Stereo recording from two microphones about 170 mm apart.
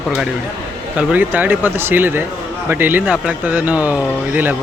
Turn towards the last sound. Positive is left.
turn(degrees=-10)  # may be behind; listen again after turning